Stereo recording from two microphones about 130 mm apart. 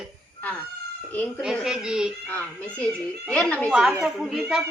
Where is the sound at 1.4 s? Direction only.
5° right (ahead or behind).